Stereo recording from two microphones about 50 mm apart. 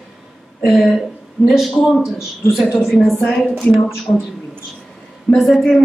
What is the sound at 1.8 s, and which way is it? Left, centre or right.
A woman's voice, centre.